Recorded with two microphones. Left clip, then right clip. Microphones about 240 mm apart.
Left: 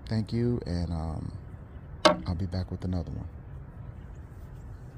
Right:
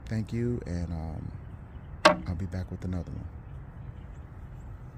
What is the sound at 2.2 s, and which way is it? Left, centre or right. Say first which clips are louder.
Speech: left 3 dB; centre.